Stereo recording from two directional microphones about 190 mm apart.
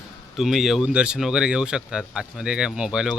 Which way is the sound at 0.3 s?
Centre (ahead or behind).